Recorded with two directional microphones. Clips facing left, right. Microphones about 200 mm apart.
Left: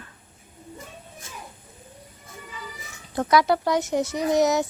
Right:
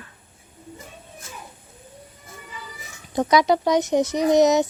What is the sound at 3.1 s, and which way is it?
Speech, 15° right (ahead or behind).